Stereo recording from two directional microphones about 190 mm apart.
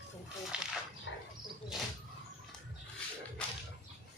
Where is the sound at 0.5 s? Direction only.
5° right (ahead or behind).